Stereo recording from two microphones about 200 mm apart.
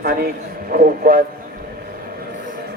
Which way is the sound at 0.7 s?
45° right (ahead or behind).